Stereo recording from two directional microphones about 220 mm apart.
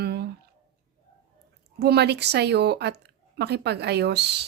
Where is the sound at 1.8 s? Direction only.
50° right (ahead or behind).